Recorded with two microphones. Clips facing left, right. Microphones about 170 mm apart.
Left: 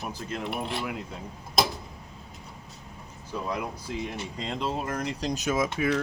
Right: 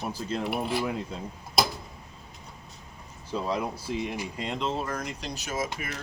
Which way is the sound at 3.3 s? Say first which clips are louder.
Right 3 dB; 25° right (ahead or behind).